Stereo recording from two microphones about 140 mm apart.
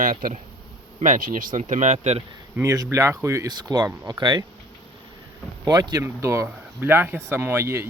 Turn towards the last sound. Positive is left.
turn(degrees=-20)  # may be behind; listen again after turning